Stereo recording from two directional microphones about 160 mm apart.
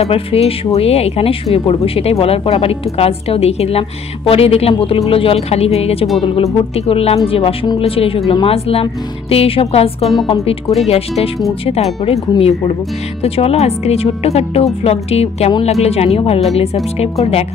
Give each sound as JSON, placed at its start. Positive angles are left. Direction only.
{"t": 0.0, "sound": "speech", "side_deg": 40}
{"t": 10.9, "sound": "speech", "side_deg": 40}